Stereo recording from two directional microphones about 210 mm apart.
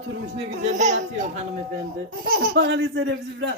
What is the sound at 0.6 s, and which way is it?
Speech, 35° right (ahead or behind).